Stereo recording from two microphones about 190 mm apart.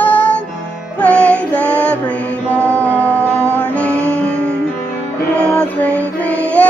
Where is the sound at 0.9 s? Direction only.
5° left (ahead or behind).